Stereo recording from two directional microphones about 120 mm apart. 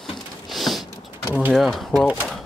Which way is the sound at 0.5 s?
Centre (ahead or behind).